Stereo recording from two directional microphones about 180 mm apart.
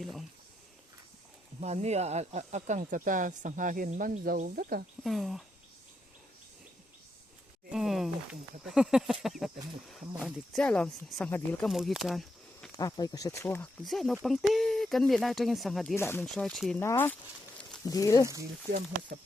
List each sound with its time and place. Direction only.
0.0 s speech: centre (ahead or behind)
1.6 s speech: 40° right (ahead or behind)
5.0 s speech: centre (ahead or behind)
7.7 s speech: centre (ahead or behind)
12.7 s speech: 20° left (ahead or behind); by 16.0 s centre (ahead or behind)
16.0 s speech: 10° left (ahead or behind)
16.3 s speech: centre (ahead or behind)
16.8 s speech: 15° left (ahead or behind)